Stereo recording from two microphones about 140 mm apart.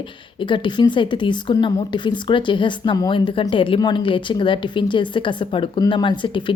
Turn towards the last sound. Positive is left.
turn(degrees=35)  # may be behind; listen again after turning